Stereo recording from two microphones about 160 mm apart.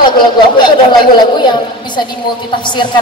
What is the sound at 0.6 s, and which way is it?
Speech, 25° left (ahead or behind).